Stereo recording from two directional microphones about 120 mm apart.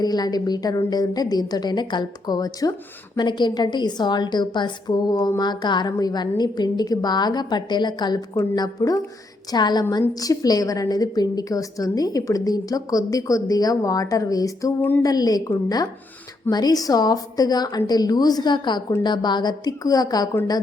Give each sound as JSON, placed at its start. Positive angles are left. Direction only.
{"t": 0.0, "sound": "a woman's voice", "side_deg": 35}
{"t": 14.8, "sound": "a sound", "side_deg": 15}
{"t": 15.0, "sound": "a woman's voice", "side_deg": 30}